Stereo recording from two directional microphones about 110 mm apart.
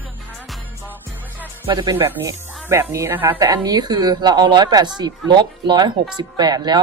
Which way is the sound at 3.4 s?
35° right (ahead or behind).